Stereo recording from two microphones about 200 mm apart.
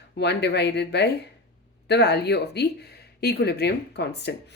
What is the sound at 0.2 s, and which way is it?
A woman's voice, 55° left (ahead or behind).